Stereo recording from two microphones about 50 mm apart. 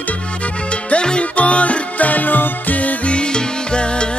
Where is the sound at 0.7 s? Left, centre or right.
Left.